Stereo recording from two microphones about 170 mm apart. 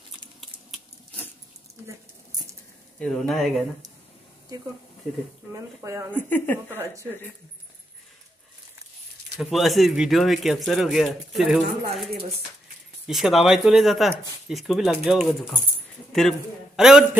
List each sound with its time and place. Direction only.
0.7 s a sound: 5° left (ahead or behind)
3.0 s speech: 5° left (ahead or behind)
5.5 s speech: 20° right (ahead or behind)
6.1 s a woman's voice: 10° left (ahead or behind)
9.4 s speech: centre (ahead or behind)
13.0 s a man's voice: centre (ahead or behind)